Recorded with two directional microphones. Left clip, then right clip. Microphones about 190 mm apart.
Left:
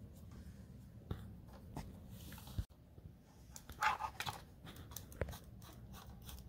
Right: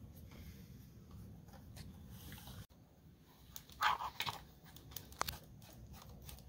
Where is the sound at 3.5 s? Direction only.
25° left (ahead or behind).